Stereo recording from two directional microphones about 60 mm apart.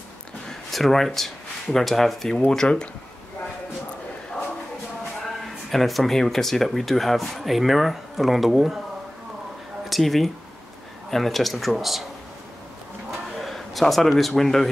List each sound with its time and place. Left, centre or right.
0.5 s speech: centre
5.4 s speech: centre
9.8 s speech: centre
13.4 s a man's voice: centre